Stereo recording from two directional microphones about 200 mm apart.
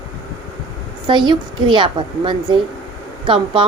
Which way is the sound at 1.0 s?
25° right (ahead or behind).